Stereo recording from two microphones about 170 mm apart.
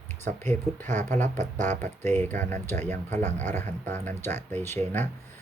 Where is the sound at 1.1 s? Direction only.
45° right (ahead or behind).